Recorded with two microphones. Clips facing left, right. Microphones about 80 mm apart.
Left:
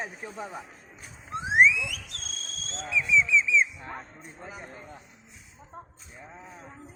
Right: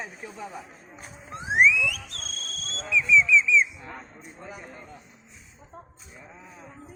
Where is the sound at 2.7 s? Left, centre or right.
Left.